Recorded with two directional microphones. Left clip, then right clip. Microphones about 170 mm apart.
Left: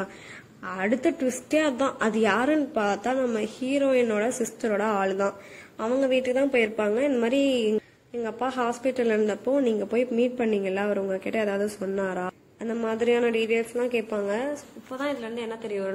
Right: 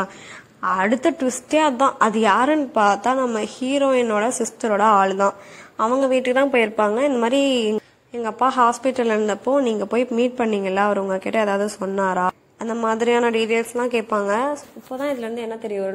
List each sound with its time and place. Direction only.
0.6 s a woman's voice: 5° right (ahead or behind)
15.0 s a woman's voice: 30° right (ahead or behind)